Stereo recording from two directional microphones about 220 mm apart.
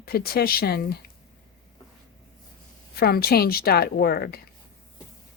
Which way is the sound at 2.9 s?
45° left (ahead or behind).